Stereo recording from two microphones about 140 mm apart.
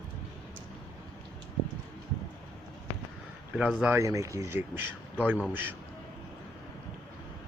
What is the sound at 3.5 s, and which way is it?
Speech, 5° right (ahead or behind).